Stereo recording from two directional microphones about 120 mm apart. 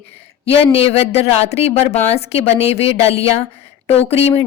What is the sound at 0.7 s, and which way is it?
A woman's voice, 60° left (ahead or behind).